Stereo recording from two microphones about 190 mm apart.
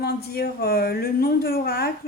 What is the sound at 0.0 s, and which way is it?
Speech, 55° left (ahead or behind).